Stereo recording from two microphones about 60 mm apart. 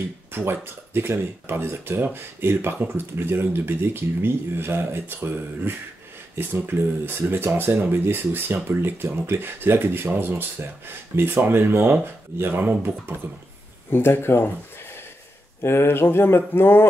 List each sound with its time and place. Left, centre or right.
0.3 s speech: right
13.8 s speech: left
15.6 s speech: left